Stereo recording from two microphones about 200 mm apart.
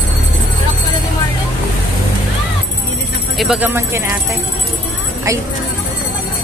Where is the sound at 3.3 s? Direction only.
5° right (ahead or behind).